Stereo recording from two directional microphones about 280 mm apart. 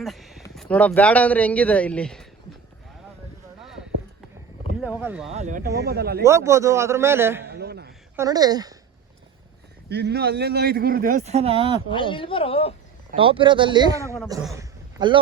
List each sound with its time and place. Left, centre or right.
0.0 s a sound: centre
0.5 s speech: centre
4.9 s speech: centre
5.3 s a man's voice: right
6.2 s a man's voice: centre
7.4 s a sound: right
8.1 s a man's voice: centre
9.9 s a man's voice: right; by 11.8 s centre
11.9 s speech: centre
13.1 s a man's voice: centre
14.4 s a sound: centre